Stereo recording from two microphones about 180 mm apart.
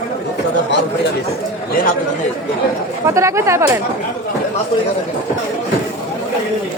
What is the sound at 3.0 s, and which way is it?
Speech, 15° right (ahead or behind).